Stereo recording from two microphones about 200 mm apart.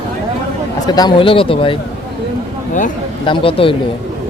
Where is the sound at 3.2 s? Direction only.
25° left (ahead or behind).